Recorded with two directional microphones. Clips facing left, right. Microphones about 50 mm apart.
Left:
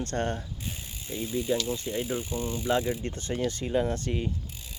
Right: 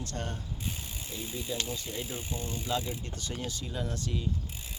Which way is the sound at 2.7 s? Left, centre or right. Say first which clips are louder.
Left 7 dB; left.